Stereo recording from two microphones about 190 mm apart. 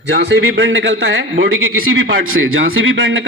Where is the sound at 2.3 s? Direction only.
90° right.